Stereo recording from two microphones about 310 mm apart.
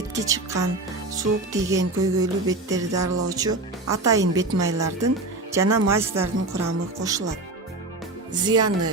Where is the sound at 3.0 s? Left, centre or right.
Right.